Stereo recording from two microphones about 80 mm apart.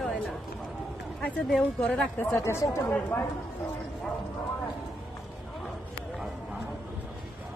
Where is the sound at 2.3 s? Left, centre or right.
Left.